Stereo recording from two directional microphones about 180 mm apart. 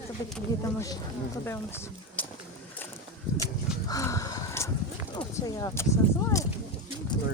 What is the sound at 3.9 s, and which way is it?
Crow, 20° left (ahead or behind).